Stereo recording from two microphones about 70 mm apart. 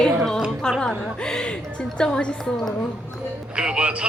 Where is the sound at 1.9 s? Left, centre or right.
Centre.